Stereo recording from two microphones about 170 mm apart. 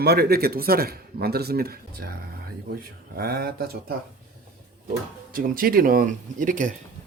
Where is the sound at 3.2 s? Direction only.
65° right (ahead or behind).